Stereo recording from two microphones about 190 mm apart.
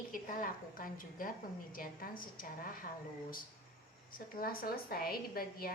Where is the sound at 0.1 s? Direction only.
45° left (ahead or behind).